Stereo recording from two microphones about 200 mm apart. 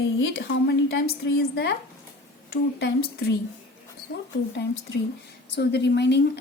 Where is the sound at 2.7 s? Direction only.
55° left (ahead or behind).